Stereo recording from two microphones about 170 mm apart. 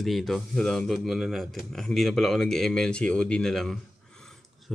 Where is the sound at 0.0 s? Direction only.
Centre (ahead or behind).